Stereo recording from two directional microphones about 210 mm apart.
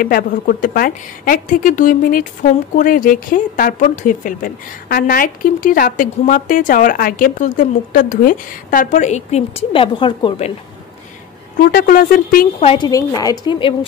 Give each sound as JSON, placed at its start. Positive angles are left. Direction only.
{"t": 0.0, "sound": "a woman's voice", "side_deg": 45}
{"t": 11.5, "sound": "speech", "side_deg": 40}
{"t": 12.5, "sound": "a woman's voice", "side_deg": 25}